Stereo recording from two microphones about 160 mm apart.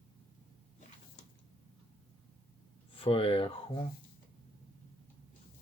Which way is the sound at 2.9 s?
35° left (ahead or behind).